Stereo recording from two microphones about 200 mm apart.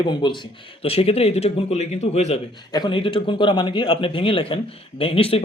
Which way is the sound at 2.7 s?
20° left (ahead or behind).